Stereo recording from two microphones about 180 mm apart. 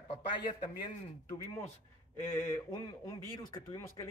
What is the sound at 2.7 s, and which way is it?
Speech, 25° left (ahead or behind).